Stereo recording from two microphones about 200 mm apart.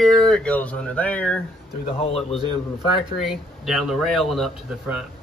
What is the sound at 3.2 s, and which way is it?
Speech, centre (ahead or behind).